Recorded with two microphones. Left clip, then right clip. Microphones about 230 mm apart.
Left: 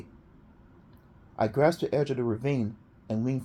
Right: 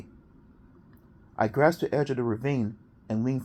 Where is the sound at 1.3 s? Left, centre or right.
Right.